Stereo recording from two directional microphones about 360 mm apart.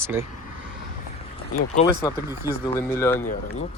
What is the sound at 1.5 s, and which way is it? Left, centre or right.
Speech, left.